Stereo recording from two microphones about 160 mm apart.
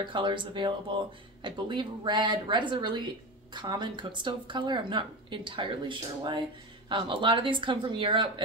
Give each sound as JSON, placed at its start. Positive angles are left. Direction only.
{"t": 0.0, "sound": "speech", "side_deg": -30}